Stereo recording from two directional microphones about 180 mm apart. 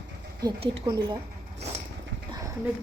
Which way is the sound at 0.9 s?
25° right (ahead or behind).